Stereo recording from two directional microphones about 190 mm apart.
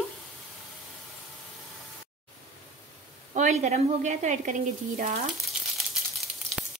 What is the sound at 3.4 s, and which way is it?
Speech, 40° right (ahead or behind).